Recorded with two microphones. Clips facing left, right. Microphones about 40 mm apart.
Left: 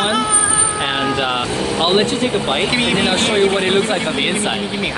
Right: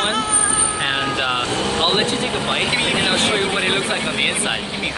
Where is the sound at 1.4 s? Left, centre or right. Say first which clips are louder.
Left 1 dB; right.